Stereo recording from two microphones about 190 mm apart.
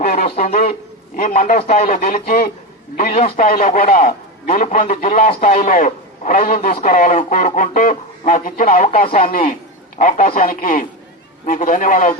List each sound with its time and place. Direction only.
0.3 s a man's voice: 40° left (ahead or behind)